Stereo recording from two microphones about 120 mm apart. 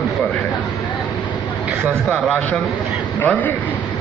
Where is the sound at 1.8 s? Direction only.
Centre (ahead or behind).